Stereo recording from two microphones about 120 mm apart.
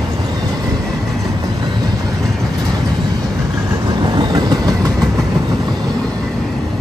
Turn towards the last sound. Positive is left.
turn(degrees=-35)  # may be behind; listen again after turning